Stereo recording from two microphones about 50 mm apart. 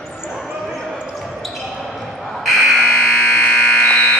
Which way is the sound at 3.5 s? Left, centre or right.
Centre.